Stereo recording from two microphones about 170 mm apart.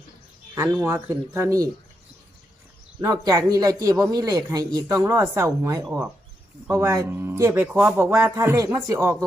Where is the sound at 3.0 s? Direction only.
20° right (ahead or behind).